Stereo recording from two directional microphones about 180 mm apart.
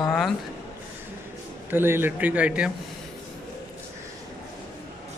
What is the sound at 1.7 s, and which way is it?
A man's voice, 10° right (ahead or behind).